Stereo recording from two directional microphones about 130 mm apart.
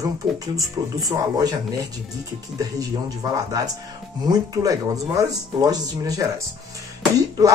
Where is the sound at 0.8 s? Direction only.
30° right (ahead or behind).